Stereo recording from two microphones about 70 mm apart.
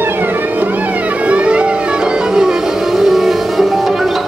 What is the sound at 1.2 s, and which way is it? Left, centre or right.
Music, centre.